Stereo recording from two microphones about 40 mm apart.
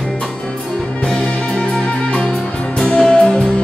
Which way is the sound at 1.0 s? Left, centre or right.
Left.